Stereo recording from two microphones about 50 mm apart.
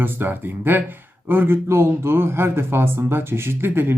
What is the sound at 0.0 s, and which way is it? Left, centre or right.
Speech, right.